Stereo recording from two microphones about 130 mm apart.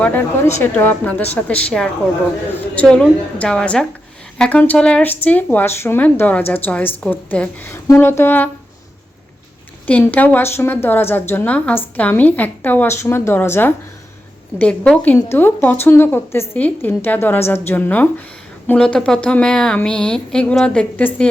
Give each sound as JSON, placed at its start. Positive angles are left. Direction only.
{"t": 0.6, "sound": "a woman's voice", "side_deg": 15}
{"t": 9.8, "sound": "a woman's voice", "side_deg": 15}